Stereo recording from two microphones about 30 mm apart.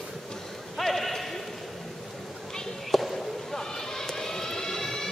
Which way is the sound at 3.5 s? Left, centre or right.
Centre.